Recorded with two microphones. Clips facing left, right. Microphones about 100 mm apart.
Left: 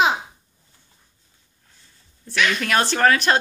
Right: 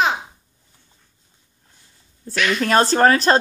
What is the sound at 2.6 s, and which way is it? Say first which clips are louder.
Speech: right 5 dB; 35° right (ahead or behind).